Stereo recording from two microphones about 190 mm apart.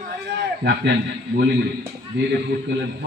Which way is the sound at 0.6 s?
60° right (ahead or behind).